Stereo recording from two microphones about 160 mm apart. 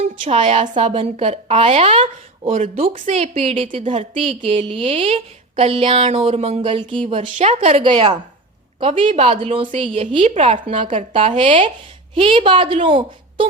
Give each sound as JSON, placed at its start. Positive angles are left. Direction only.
{"t": 0.0, "sound": "a woman's voice", "side_deg": -40}
{"t": 7.2, "sound": "a woman's voice", "side_deg": -45}
{"t": 10.2, "sound": "a woman's voice", "side_deg": -45}
{"t": 10.9, "sound": "a woman's voice", "side_deg": -35}